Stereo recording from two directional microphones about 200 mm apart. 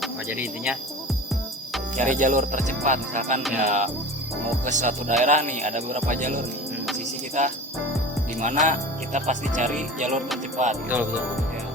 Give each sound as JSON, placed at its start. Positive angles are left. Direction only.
{"t": 0.0, "sound": "speech", "side_deg": -5}
{"t": 2.0, "sound": "music", "side_deg": -40}